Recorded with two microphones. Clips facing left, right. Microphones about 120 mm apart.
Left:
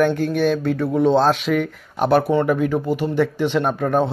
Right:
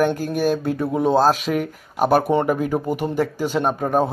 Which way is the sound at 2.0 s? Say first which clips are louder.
Even; 40° right (ahead or behind).